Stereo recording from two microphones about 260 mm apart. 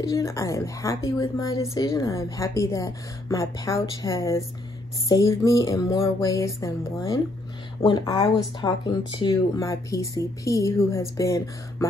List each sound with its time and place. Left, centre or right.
0.0 s a woman's voice: centre